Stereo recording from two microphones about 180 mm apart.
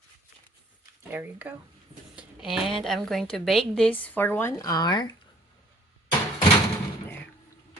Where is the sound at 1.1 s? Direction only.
10° right (ahead or behind); by 5.1 s 20° left (ahead or behind).